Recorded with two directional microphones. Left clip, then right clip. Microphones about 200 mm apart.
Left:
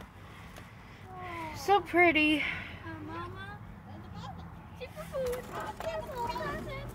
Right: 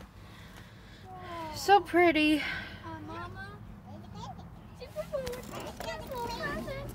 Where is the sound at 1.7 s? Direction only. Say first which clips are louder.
Even; 5° right (ahead or behind).